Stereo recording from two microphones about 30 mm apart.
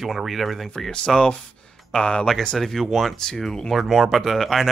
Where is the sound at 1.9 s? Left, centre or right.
Left.